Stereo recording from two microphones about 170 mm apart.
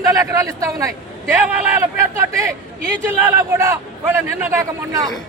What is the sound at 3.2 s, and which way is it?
A man's voice, 15° right (ahead or behind).